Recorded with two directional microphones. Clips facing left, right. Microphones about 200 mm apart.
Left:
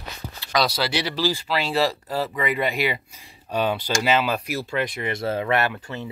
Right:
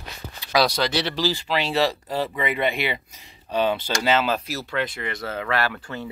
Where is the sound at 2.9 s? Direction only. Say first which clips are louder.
Left 1 dB; 10° left (ahead or behind).